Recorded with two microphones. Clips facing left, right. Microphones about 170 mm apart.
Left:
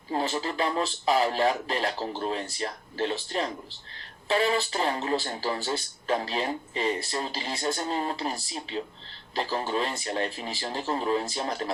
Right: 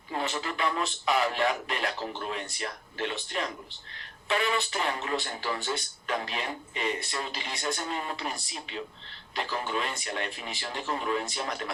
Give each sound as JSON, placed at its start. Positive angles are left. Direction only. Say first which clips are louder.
{"t": 0.1, "sound": "speech", "louder": "left 4 dB", "side_deg": 35}